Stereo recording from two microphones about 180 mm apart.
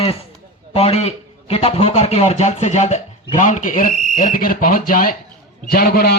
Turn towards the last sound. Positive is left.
turn(degrees=60)  # may be behind; listen again after turning